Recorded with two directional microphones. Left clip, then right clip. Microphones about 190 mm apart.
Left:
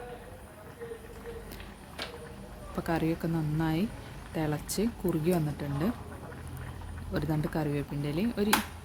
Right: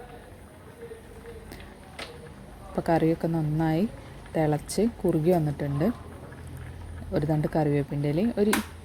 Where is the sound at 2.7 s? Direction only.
25° right (ahead or behind).